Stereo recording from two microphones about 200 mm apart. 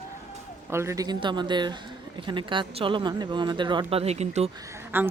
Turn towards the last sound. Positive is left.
turn(degrees=-10)  # may be behind; listen again after turning